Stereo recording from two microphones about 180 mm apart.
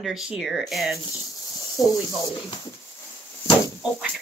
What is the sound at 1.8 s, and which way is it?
Speech, 20° left (ahead or behind).